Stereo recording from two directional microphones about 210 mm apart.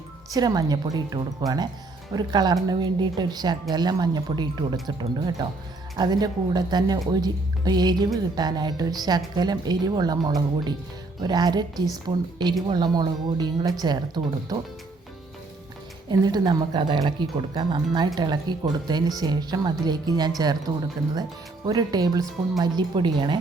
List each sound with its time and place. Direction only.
0.3 s speech: 20° right (ahead or behind)
16.0 s speech: 20° right (ahead or behind)
21.7 s speech: 20° right (ahead or behind)